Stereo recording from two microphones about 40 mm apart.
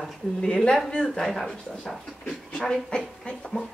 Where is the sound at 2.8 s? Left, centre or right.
Left.